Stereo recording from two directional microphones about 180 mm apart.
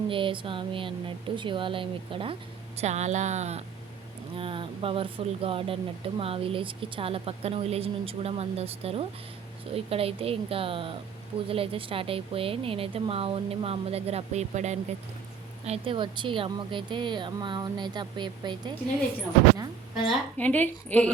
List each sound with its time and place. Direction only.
0.1 s a woman's voice: 30° right (ahead or behind)
20.0 s speech: 5° left (ahead or behind)